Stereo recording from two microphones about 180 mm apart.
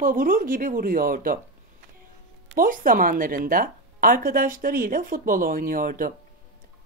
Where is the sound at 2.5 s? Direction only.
50° right (ahead or behind).